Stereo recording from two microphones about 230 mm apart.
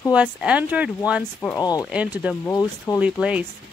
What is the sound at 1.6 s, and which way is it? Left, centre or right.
Speech, centre.